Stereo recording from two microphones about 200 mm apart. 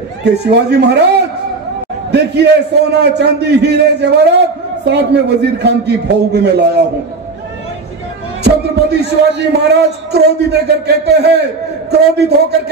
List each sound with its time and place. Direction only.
0.2 s a man's voice: 55° right (ahead or behind)
9.0 s a man's voice: 60° right (ahead or behind)